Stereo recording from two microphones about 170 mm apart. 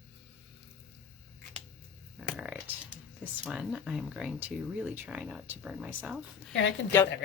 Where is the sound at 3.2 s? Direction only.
5° right (ahead or behind).